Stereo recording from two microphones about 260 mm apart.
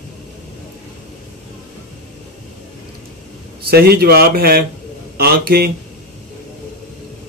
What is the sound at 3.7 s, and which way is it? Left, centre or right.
Speech, right.